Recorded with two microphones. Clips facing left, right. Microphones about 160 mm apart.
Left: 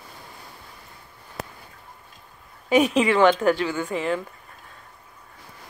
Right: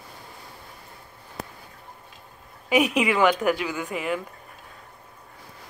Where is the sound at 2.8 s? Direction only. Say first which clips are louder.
Left 3 dB; 10° right (ahead or behind).